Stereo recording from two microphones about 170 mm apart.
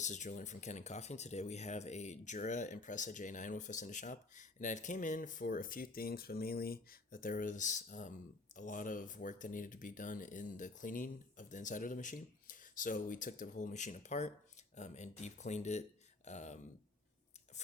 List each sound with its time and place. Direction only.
0.0 s speech: 45° left (ahead or behind)